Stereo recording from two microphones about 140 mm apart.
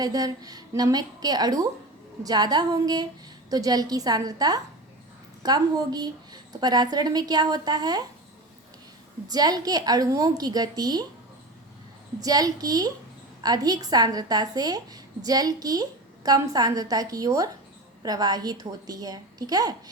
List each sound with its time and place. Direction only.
0.0 s a woman's voice: 25° right (ahead or behind)
9.3 s a woman's voice: 30° right (ahead or behind)
12.2 s a woman's voice: 25° right (ahead or behind)